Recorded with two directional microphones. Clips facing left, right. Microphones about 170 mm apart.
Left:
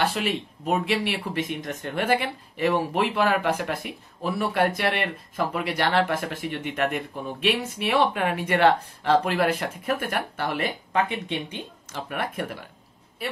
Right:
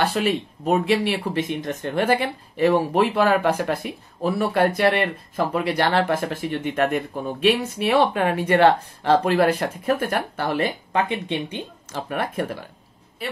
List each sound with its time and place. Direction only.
0.0 s speech: 40° right (ahead or behind)